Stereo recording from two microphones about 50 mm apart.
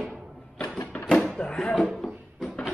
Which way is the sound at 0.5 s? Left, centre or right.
Left.